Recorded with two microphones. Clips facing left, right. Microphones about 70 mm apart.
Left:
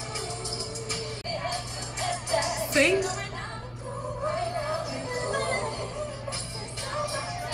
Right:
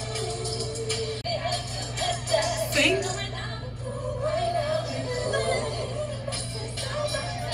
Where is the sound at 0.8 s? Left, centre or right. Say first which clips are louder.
Right 5 dB; left.